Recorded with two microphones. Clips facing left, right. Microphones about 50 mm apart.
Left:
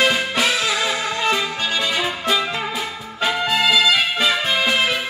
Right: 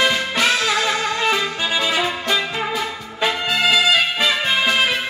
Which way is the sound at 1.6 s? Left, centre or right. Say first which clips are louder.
Right 2 dB; centre.